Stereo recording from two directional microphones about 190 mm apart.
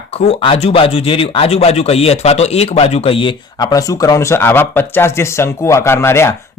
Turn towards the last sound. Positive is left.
turn(degrees=15)  # may be behind; listen again after turning